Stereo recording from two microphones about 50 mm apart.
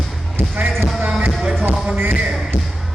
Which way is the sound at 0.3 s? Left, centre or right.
Right.